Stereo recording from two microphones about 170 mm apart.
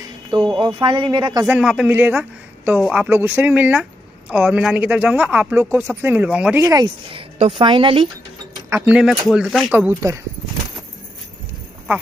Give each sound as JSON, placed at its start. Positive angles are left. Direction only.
{"t": 0.5, "sound": "speech", "side_deg": -25}
{"t": 1.4, "sound": "a man's voice", "side_deg": -10}
{"t": 6.6, "sound": "speech", "side_deg": -20}
{"t": 7.1, "sound": "speech", "side_deg": -35}
{"t": 8.6, "sound": "a sound", "side_deg": -15}
{"t": 8.9, "sound": "speech", "side_deg": -5}
{"t": 9.8, "sound": "speech", "side_deg": -15}